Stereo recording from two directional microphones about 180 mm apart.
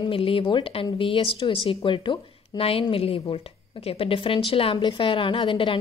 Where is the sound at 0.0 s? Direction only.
30° left (ahead or behind).